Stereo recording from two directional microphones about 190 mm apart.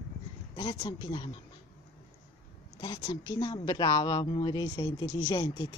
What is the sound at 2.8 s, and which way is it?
Speech, 25° left (ahead or behind).